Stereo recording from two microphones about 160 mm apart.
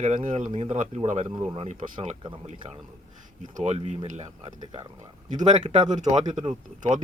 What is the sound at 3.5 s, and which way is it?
Speech, 45° right (ahead or behind).